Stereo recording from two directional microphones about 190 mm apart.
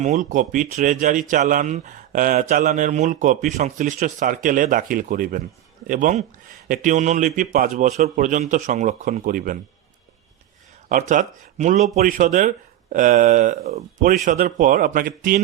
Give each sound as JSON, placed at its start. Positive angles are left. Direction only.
{"t": 0.0, "sound": "a man's voice", "side_deg": -40}
{"t": 10.8, "sound": "a man's voice", "side_deg": -40}